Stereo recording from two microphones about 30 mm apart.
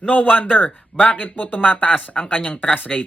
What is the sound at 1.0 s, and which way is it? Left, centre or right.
A man's voice, left.